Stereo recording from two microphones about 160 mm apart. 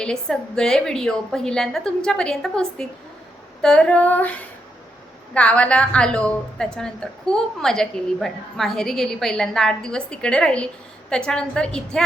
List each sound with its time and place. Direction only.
0.0 s a woman's voice: 5° left (ahead or behind)
3.6 s female singing: 5° left (ahead or behind)
5.3 s a woman's voice: 5° left (ahead or behind)